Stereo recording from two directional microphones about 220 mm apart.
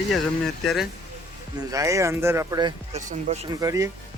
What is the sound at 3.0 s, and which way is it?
Speech, 35° right (ahead or behind).